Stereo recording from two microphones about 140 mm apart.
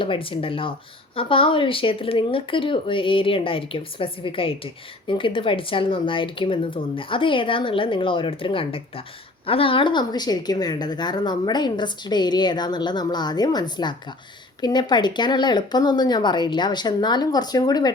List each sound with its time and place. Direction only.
0.0 s speech: 40° left (ahead or behind)